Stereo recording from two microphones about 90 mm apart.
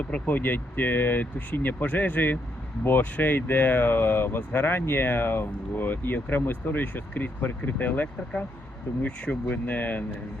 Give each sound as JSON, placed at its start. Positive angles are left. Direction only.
{"t": 0.0, "sound": "speech", "side_deg": 15}